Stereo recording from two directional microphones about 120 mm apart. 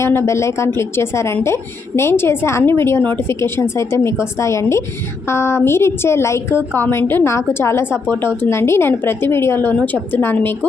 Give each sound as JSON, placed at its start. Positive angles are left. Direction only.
{"t": 0.0, "sound": "a woman's voice", "side_deg": 20}